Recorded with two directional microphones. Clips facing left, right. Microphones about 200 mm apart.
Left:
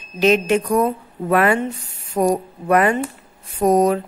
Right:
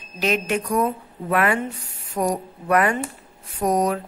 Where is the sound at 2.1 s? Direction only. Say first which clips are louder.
Left 5 dB; 25° left (ahead or behind).